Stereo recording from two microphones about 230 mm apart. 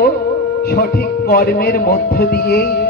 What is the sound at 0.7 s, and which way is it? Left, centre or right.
Speech, left.